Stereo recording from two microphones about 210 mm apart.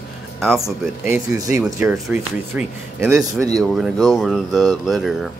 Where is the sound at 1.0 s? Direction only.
15° right (ahead or behind).